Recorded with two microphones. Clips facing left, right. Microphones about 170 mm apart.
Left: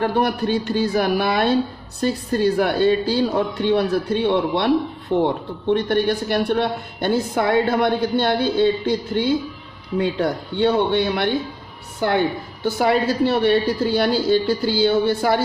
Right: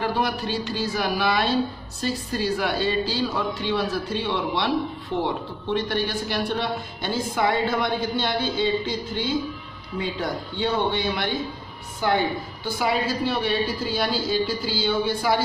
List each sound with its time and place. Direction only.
0.0 s a woman's voice: 55° left (ahead or behind)